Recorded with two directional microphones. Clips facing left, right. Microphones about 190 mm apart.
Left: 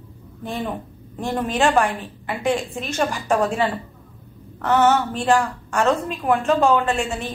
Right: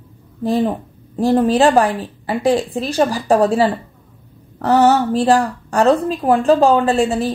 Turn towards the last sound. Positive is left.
turn(degrees=-35)  # may be behind; listen again after turning